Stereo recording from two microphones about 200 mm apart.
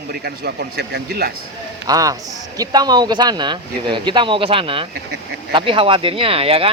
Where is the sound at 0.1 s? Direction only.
50° right (ahead or behind).